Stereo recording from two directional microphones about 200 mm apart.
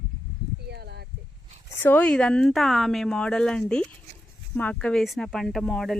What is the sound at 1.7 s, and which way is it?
Speech, 10° left (ahead or behind).